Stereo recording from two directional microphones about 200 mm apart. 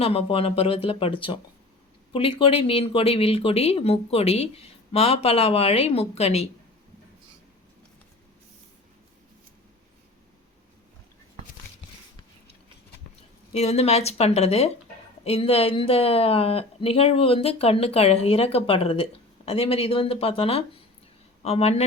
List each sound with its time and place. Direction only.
0.0 s speech: 30° left (ahead or behind)
13.5 s a woman's voice: 30° left (ahead or behind)